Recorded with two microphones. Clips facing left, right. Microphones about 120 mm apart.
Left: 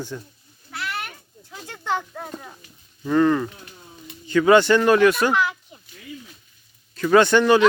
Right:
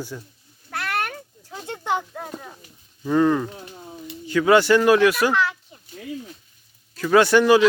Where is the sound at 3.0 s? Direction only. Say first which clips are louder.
Even; 10° right (ahead or behind).